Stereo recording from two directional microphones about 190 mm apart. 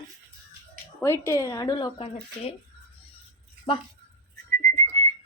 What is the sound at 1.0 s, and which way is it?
Speech, 15° left (ahead or behind).